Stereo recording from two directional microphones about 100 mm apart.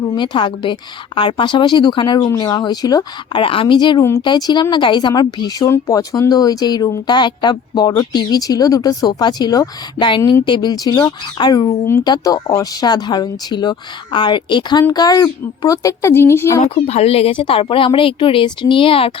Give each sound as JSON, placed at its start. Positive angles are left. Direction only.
{"t": 0.1, "sound": "speech", "side_deg": 50}
{"t": 2.2, "sound": "speech", "side_deg": 35}
{"t": 3.3, "sound": "speech", "side_deg": 60}
{"t": 5.6, "sound": "speech", "side_deg": 30}
{"t": 16.6, "sound": "a woman's voice", "side_deg": 85}
{"t": 17.3, "sound": "speech", "side_deg": 60}